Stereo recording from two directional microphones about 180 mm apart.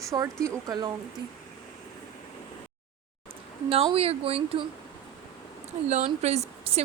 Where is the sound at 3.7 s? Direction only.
35° right (ahead or behind).